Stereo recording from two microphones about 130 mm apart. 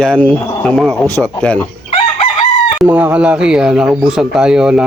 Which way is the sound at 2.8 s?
10° right (ahead or behind).